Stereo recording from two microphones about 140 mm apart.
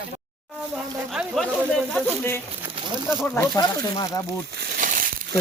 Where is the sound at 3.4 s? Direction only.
30° left (ahead or behind).